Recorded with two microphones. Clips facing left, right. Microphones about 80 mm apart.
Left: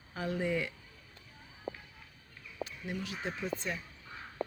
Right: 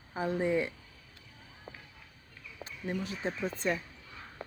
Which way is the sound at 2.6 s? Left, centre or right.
Right.